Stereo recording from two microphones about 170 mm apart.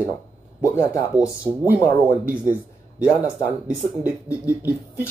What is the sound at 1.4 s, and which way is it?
Speech, 10° right (ahead or behind).